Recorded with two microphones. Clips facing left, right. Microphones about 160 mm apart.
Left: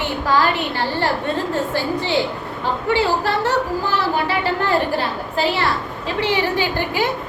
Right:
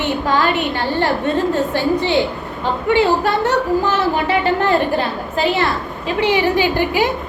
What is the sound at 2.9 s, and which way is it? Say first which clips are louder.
A woman's voice: right 4 dB; 20° right (ahead or behind).